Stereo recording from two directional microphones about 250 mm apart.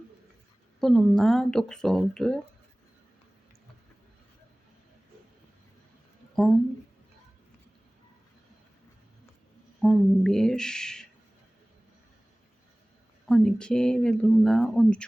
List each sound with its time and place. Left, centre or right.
0.8 s speech: centre
9.8 s speech: centre
13.2 s speech: centre